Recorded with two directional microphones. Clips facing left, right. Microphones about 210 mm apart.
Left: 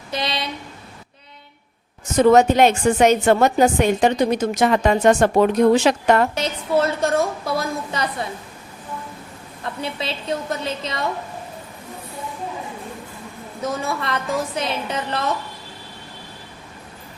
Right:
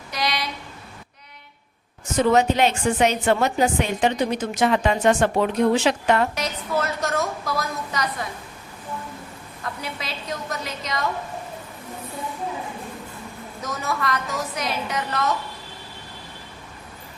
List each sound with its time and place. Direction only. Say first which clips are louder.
0.1 s a woman's voice: left 1 dB; 25° left (ahead or behind)
2.1 s a woman's voice: left 5 dB; 45° left (ahead or behind)
6.3 s a woman's voice: left 5 dB; 30° left (ahead or behind)
9.8 s a woman's voice: left 5 dB; 30° left (ahead or behind)
13.6 s a woman's voice: left 3 dB; 30° left (ahead or behind)